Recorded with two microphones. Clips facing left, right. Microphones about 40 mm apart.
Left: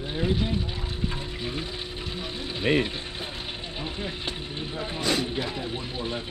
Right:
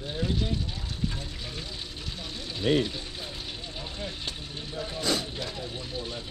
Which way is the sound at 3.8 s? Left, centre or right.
Left.